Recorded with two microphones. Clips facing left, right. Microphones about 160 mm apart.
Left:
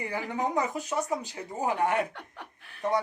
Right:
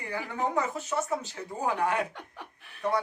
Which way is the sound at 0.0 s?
15° left (ahead or behind).